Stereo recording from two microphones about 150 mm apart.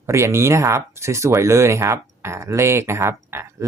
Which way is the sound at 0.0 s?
20° right (ahead or behind).